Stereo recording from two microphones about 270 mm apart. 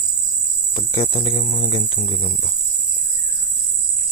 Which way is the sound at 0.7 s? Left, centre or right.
Centre.